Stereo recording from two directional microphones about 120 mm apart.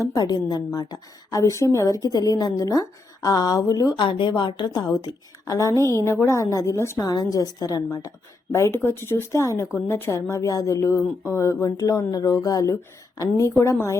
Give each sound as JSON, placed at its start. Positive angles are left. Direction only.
{"t": 0.0, "sound": "a woman's voice", "side_deg": 30}